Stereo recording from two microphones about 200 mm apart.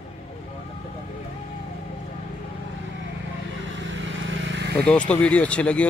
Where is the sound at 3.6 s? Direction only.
65° right (ahead or behind).